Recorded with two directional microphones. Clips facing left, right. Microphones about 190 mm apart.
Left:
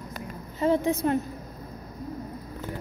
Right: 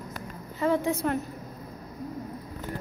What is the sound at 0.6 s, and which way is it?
Speech, 20° left (ahead or behind).